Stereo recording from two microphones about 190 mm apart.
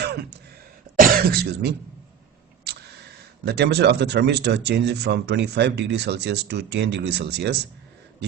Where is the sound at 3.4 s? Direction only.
60° right (ahead or behind).